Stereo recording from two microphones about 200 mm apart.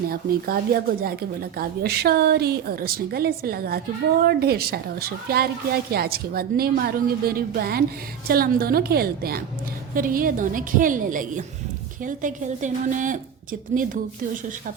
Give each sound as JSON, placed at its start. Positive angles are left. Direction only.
{"t": 0.1, "sound": "a woman's voice", "side_deg": -50}